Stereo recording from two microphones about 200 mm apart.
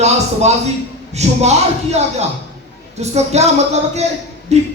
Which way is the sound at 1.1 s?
35° right (ahead or behind).